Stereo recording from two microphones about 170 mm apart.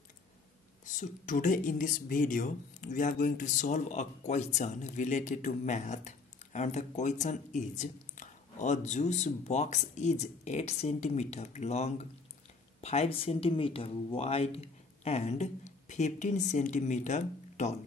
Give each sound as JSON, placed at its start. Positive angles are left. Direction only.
{"t": 0.9, "sound": "speech", "side_deg": 50}